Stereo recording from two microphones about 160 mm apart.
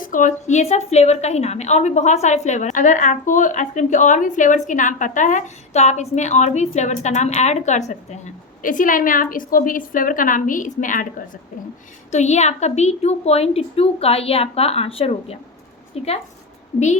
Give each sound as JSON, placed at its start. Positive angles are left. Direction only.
{"t": 0.0, "sound": "a woman's voice", "side_deg": 55}
{"t": 12.1, "sound": "a woman's voice", "side_deg": 45}